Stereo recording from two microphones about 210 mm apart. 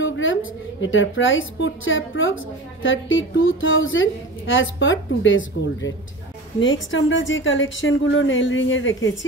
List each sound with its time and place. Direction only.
0.0 s a woman's voice: 65° left (ahead or behind)
6.6 s a woman's voice: 65° left (ahead or behind)